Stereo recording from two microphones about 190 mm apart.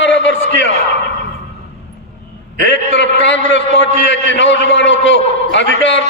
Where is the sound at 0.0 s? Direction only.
70° left (ahead or behind).